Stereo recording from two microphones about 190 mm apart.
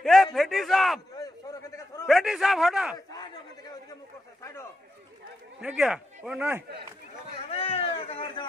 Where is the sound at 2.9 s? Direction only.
20° left (ahead or behind).